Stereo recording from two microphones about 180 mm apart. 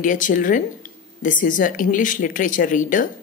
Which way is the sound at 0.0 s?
45° left (ahead or behind).